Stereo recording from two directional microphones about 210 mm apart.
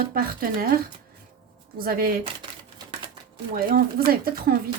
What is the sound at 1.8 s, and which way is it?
Speech, 45° right (ahead or behind).